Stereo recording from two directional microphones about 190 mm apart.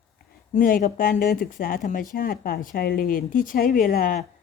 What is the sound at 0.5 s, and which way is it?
Speech, 45° left (ahead or behind).